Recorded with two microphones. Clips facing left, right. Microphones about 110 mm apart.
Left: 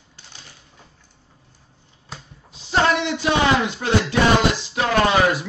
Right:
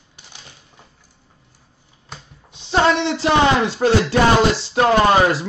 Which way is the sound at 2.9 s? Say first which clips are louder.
Right 4 dB; 30° right (ahead or behind).